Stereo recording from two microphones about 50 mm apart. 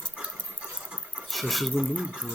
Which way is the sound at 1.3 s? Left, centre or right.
Centre.